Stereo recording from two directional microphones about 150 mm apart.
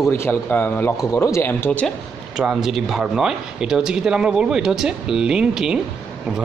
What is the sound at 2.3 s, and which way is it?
Speech, 5° right (ahead or behind).